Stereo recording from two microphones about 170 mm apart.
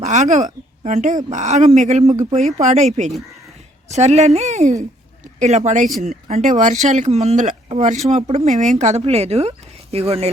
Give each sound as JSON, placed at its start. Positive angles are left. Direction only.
{"t": 0.0, "sound": "speech", "side_deg": -45}